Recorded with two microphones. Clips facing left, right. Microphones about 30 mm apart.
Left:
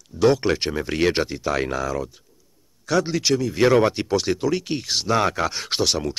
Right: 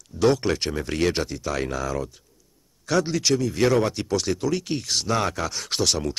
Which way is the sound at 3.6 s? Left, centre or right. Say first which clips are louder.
Left 5 dB; left.